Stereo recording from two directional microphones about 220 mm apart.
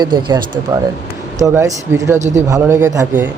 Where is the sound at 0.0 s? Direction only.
20° right (ahead or behind).